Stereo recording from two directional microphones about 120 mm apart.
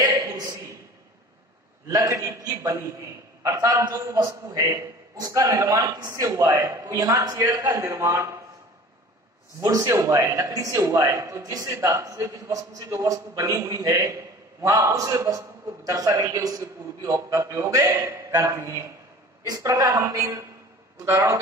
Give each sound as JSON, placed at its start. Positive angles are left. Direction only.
{"t": 0.0, "sound": "a sound", "side_deg": -30}
{"t": 1.9, "sound": "a man's voice", "side_deg": -30}
{"t": 9.6, "sound": "a man's voice", "side_deg": -25}